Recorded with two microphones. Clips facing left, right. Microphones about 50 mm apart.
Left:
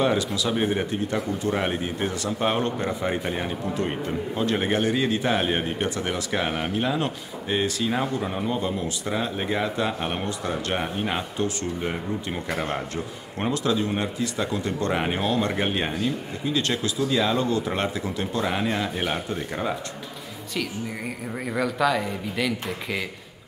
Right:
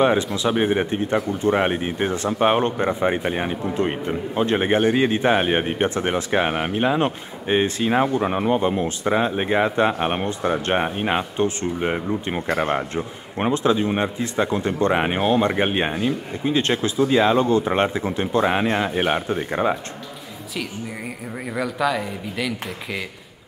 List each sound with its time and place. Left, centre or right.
0.0 s speech: right
21.5 s speech: centre